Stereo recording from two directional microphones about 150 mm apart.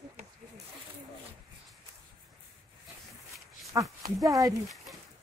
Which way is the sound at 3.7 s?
25° right (ahead or behind).